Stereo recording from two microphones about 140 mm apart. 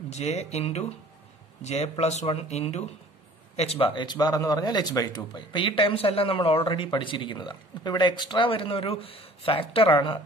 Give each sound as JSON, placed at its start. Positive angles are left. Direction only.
{"t": 0.1, "sound": "speech", "side_deg": 55}